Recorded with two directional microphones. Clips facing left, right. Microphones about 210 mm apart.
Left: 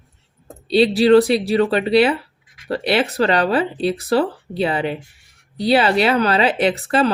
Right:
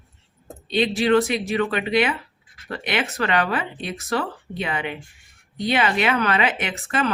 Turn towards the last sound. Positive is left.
turn(degrees=35)  # may be behind; listen again after turning